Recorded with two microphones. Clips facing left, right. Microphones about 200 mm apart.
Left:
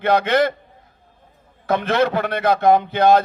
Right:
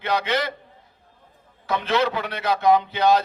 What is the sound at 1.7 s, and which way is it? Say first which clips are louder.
A man's voice: left 4 dB; 50° left (ahead or behind).